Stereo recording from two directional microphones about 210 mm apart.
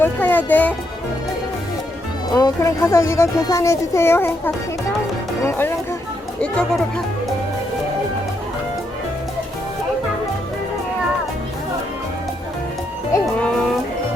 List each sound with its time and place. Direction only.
0.0 s speech: 10° left (ahead or behind)
2.3 s speech: 15° left (ahead or behind)